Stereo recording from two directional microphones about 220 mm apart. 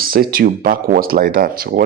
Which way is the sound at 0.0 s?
40° right (ahead or behind).